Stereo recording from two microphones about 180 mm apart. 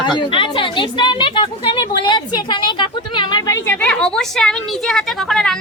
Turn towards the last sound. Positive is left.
turn(degrees=0)  # may be behind; listen again after turning